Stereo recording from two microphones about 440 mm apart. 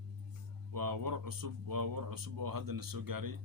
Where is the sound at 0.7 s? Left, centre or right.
Right.